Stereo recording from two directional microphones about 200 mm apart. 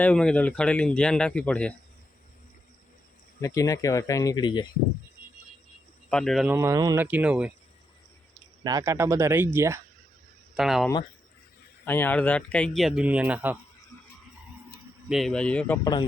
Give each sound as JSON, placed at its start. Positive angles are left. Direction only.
{"t": 0.0, "sound": "speech", "side_deg": 5}
{"t": 3.4, "sound": "speech", "side_deg": 15}
{"t": 6.1, "sound": "speech", "side_deg": 5}
{"t": 6.5, "sound": "speech", "side_deg": -15}
{"t": 8.6, "sound": "speech", "side_deg": -15}
{"t": 10.5, "sound": "speech", "side_deg": 0}
{"t": 11.9, "sound": "speech", "side_deg": 10}
{"t": 15.1, "sound": "speech", "side_deg": 0}
{"t": 15.8, "sound": "speech", "side_deg": 20}